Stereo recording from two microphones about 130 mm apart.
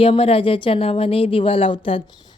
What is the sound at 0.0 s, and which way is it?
Speech, 45° left (ahead or behind).